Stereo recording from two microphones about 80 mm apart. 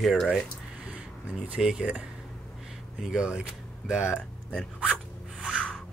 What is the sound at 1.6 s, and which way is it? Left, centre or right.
Speech, centre.